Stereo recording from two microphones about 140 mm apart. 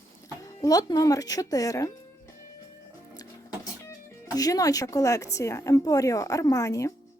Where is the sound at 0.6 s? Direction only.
25° left (ahead or behind).